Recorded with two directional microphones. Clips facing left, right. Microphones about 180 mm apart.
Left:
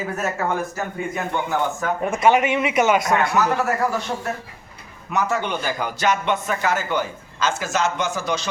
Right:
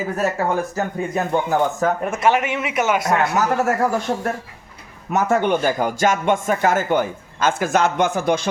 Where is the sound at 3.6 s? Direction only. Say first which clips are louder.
Right 3 dB; 50° right (ahead or behind).